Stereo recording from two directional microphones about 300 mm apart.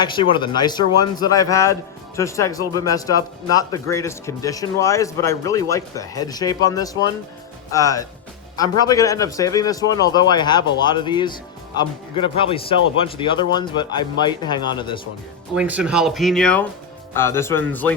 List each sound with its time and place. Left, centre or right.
0.0 s speech: centre
15.5 s speech: centre